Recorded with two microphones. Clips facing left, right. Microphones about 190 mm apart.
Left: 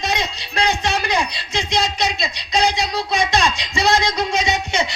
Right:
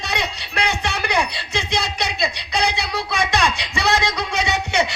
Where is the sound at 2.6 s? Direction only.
65° right (ahead or behind).